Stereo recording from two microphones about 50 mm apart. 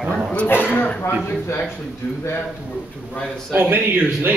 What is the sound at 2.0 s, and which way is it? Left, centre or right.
Speech, left.